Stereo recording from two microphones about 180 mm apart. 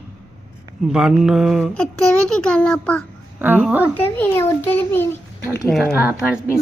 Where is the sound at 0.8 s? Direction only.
5° right (ahead or behind).